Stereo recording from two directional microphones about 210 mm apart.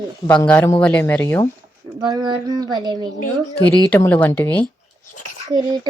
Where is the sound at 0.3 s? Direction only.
5° left (ahead or behind).